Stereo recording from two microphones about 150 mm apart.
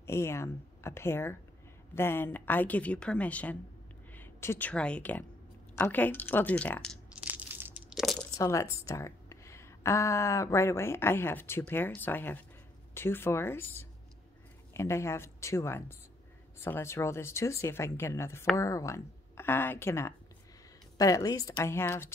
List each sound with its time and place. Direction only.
0.0 s a woman's voice: 15° left (ahead or behind)
7.2 s crushing: 10° right (ahead or behind)
8.0 s a sound: centre (ahead or behind)
8.4 s a woman's voice: 20° left (ahead or behind)